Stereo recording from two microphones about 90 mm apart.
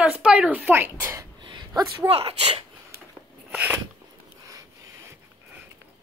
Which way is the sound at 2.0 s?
90° right.